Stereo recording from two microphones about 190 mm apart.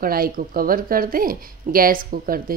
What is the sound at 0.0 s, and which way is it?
Speech, 50° right (ahead or behind).